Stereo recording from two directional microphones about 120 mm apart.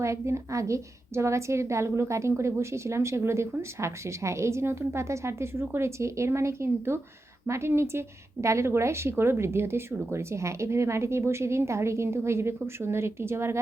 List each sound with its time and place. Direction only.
0.0 s a woman's voice: 25° right (ahead or behind)